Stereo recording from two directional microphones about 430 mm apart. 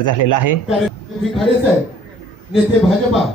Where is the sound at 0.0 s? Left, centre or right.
Left.